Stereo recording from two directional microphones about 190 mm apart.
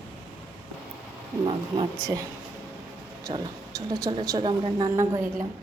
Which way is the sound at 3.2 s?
20° right (ahead or behind).